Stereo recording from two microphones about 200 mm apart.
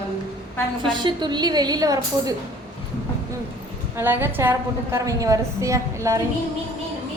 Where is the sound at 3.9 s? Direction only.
10° right (ahead or behind).